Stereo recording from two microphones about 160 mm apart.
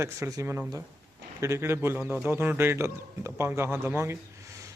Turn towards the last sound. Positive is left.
turn(degrees=-20)  # may be behind; listen again after turning